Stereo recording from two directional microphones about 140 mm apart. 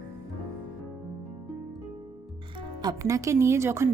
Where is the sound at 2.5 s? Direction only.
30° right (ahead or behind).